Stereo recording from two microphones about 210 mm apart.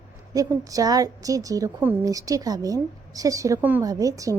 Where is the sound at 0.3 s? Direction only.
15° right (ahead or behind).